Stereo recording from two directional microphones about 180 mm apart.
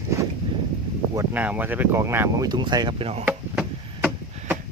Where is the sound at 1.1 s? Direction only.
10° right (ahead or behind); by 3.1 s 25° right (ahead or behind).